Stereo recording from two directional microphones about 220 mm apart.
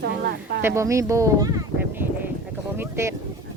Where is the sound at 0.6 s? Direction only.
10° right (ahead or behind).